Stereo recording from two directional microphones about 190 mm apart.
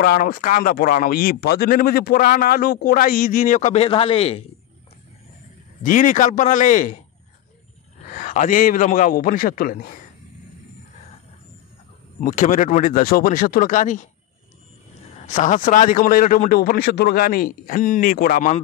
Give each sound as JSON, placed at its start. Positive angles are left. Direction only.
{"t": 0.0, "sound": "speech", "side_deg": 50}
{"t": 5.8, "sound": "a man's voice", "side_deg": 40}
{"t": 8.0, "sound": "speech", "side_deg": 45}
{"t": 12.2, "sound": "speech", "side_deg": 45}
{"t": 15.2, "sound": "speech", "side_deg": 40}